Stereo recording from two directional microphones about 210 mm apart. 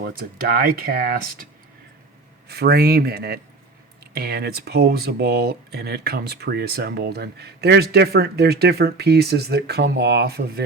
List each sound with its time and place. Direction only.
0.0 s speech: 45° right (ahead or behind)
2.5 s speech: 50° right (ahead or behind)